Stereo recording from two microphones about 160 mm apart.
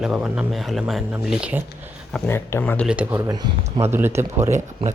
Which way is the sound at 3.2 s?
25° right (ahead or behind).